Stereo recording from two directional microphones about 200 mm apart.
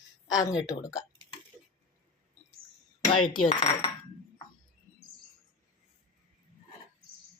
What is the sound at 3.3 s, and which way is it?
Speech, 25° left (ahead or behind).